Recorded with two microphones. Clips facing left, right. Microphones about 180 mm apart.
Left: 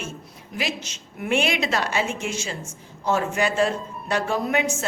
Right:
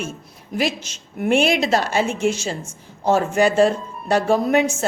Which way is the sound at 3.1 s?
45° right (ahead or behind).